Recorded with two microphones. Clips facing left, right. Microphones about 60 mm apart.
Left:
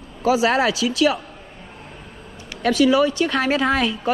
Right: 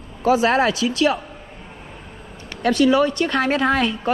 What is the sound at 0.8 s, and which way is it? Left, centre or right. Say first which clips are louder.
Speech: even; left.